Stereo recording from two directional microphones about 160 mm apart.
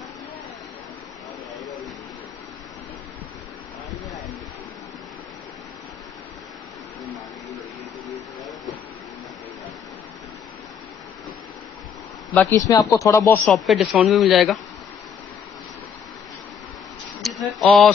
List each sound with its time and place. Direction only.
12.4 s speech: 15° left (ahead or behind)
13.5 s speech: centre (ahead or behind)
17.2 s a sound: centre (ahead or behind)